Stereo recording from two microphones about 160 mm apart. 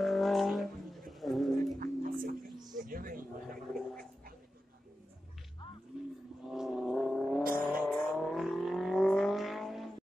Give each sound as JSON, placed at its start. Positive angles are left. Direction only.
{"t": 0.0, "sound": "vehicle", "side_deg": 0}
{"t": 1.8, "sound": "music", "side_deg": -60}
{"t": 2.9, "sound": "a sound", "side_deg": -60}
{"t": 3.7, "sound": "a sound", "side_deg": 5}
{"t": 5.9, "sound": "wild animals", "side_deg": -5}
{"t": 6.4, "sound": "vehicle", "side_deg": -5}